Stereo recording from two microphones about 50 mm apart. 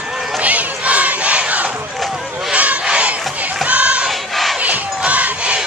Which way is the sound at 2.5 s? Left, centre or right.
Right.